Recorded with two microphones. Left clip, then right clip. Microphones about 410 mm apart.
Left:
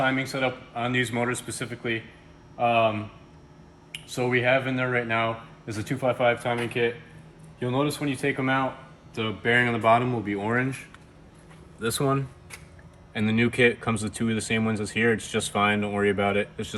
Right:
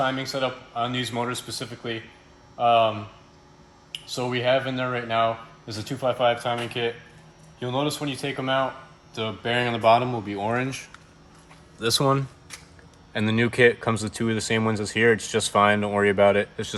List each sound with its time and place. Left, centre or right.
0.0 s speech: centre
4.1 s speech: centre
11.8 s speech: centre